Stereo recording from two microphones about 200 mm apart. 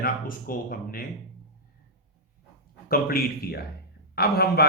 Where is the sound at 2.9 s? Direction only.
45° left (ahead or behind).